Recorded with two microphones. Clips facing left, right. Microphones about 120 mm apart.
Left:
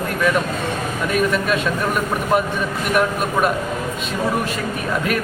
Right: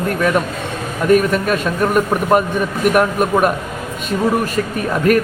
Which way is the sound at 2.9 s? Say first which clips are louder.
Right 3 dB; 50° right (ahead or behind).